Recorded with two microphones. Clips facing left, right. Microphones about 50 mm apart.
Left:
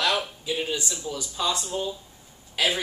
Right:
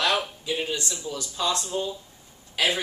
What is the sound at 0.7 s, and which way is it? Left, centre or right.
Speech, centre.